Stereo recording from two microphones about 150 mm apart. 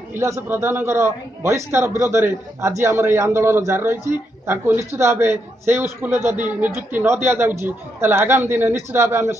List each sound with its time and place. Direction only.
0.1 s a man's voice: 15° right (ahead or behind)